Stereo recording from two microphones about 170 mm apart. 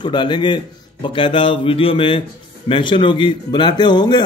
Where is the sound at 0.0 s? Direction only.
25° left (ahead or behind).